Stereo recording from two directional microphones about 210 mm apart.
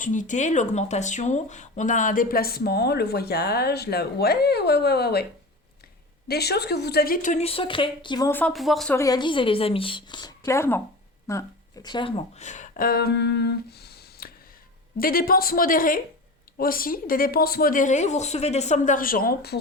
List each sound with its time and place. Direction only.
0.0 s speech: 35° left (ahead or behind)
6.2 s a woman's voice: 50° left (ahead or behind); by 8.3 s 20° left (ahead or behind)
8.3 s speech: 5° left (ahead or behind)
9.0 s a woman's voice: 20° left (ahead or behind); by 19.5 s 45° left (ahead or behind)